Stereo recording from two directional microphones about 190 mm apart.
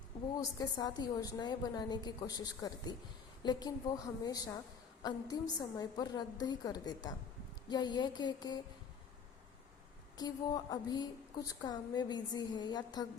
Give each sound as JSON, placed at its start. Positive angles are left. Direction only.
{"t": 0.3, "sound": "a woman's voice", "side_deg": 20}
{"t": 10.2, "sound": "a woman's voice", "side_deg": 20}